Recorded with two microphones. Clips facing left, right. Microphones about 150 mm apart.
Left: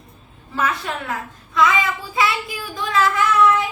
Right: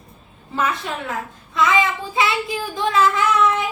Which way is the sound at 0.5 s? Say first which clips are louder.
Even; 25° right (ahead or behind).